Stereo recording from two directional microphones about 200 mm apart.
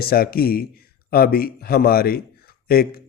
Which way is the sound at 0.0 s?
50° left (ahead or behind).